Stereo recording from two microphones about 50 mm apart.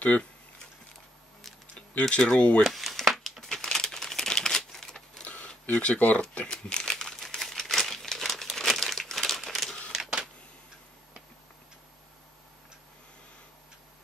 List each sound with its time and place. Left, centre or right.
0.0 s speech: left
1.8 s speech: centre
2.6 s crumpling: centre
5.2 s camera: left
6.3 s crumpling: centre